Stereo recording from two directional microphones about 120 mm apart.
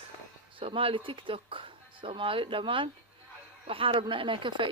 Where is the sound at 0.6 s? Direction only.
50° right (ahead or behind).